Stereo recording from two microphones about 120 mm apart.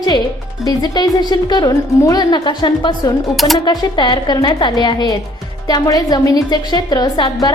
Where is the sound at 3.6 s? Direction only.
40° left (ahead or behind).